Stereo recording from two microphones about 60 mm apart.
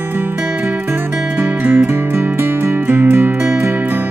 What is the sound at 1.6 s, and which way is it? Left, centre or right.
Music, right.